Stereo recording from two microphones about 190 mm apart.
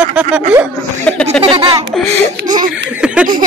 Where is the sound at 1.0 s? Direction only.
5° left (ahead or behind).